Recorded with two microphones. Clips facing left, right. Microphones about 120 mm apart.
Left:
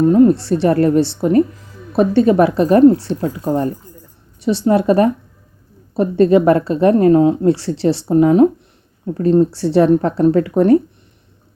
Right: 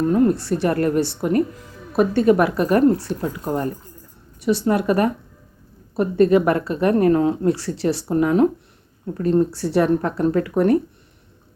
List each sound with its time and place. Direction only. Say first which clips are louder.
0.0 s a woman's voice: left 7 dB; 20° left (ahead or behind)